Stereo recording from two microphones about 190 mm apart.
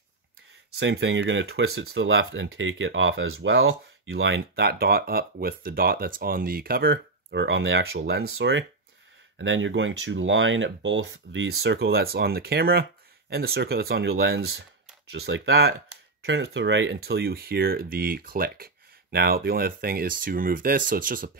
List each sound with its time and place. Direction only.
0.7 s speech: 70° right (ahead or behind)
16.3 s speech: 75° right (ahead or behind); by 21.3 s 45° right (ahead or behind)